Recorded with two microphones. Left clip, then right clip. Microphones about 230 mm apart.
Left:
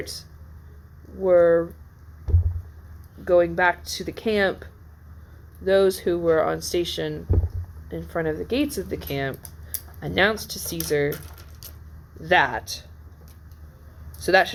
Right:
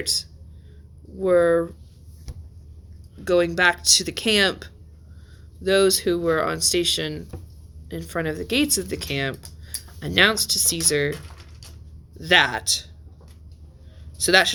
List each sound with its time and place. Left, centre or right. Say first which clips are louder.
0.0 s speech: right 10 dB; right
3.2 s speech: even; right
12.2 s speech: right 2 dB; right
14.2 s speech: right 1 dB; right